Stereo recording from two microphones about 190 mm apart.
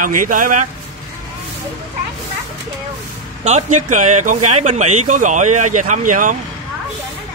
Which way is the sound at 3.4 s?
40° right (ahead or behind).